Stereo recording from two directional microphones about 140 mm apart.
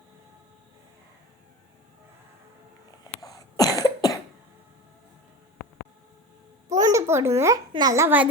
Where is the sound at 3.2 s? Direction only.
25° left (ahead or behind).